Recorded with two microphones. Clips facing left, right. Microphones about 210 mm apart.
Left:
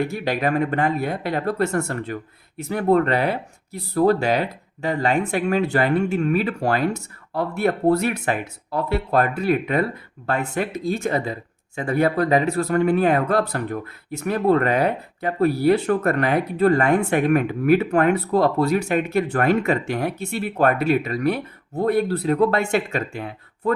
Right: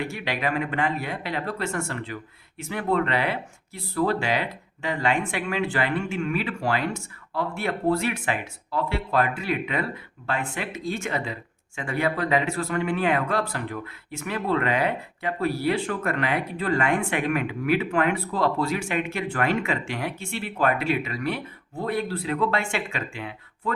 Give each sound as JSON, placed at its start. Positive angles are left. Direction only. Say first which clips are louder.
{"t": 0.0, "sound": "speech", "louder": "left 6 dB", "side_deg": 40}